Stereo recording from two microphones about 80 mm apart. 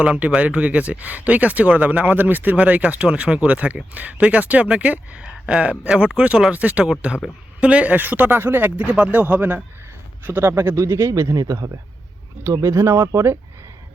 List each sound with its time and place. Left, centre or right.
0.0 s a man's voice: centre; by 11.7 s right
12.6 s a man's voice: right